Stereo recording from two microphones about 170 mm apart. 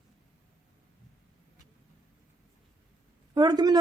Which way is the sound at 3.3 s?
25° right (ahead or behind).